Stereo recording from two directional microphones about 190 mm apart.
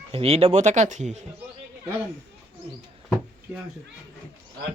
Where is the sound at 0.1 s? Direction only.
30° right (ahead or behind).